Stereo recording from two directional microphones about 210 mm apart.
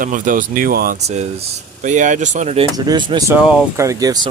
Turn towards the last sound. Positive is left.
turn(degrees=-15)  # may be behind; listen again after turning